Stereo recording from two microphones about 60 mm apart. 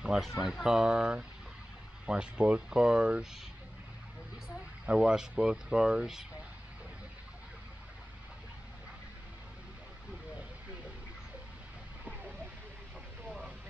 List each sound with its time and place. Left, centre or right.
0.4 s speech: centre
4.8 s speech: centre
12.0 s vehicle: right